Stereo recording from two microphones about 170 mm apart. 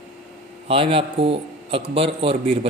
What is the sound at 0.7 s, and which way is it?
A man's voice, 35° right (ahead or behind).